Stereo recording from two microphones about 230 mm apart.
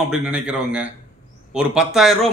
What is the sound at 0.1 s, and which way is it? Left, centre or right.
A man's voice, centre.